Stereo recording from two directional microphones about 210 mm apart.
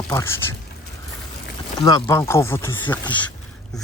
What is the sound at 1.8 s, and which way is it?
Speech, 15° left (ahead or behind).